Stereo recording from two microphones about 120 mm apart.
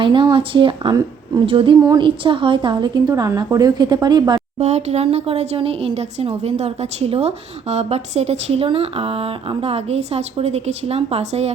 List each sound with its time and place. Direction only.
0.0 s a woman's voice: 45° right (ahead or behind)
4.6 s a woman's voice: 65° right (ahead or behind)